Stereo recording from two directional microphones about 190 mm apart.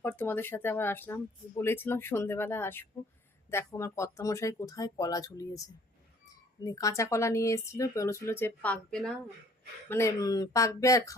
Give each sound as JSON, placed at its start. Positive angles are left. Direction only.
{"t": 0.0, "sound": "speech", "side_deg": 10}
{"t": 6.7, "sound": "speech", "side_deg": 20}
{"t": 9.9, "sound": "speech", "side_deg": 15}